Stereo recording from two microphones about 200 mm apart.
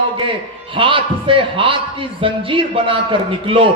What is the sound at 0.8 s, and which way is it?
A man's voice, 25° right (ahead or behind).